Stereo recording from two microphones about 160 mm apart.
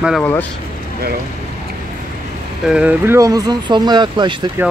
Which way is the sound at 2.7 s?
10° right (ahead or behind).